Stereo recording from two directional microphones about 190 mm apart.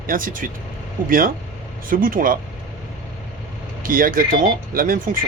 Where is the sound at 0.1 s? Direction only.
45° right (ahead or behind).